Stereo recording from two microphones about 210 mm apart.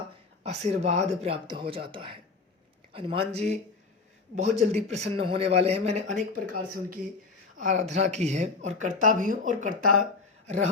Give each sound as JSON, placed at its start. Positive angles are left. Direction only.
{"t": 0.4, "sound": "speech", "side_deg": -30}
{"t": 4.6, "sound": "speech", "side_deg": -30}